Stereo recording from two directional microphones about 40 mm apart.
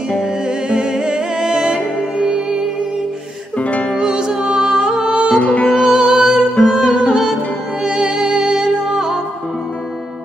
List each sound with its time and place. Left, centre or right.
0.2 s music: centre
3.5 s music: left
3.9 s music: centre
5.4 s music: left
5.9 s music: centre